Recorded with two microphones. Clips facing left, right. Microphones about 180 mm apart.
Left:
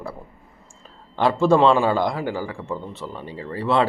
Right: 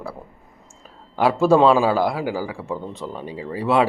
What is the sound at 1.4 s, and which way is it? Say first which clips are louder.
A man's voice: right 1 dB; 10° right (ahead or behind).